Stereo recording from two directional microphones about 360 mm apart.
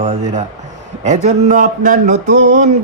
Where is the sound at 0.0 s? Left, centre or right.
Centre.